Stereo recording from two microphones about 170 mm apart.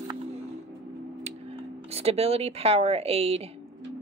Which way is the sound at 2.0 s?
35° right (ahead or behind).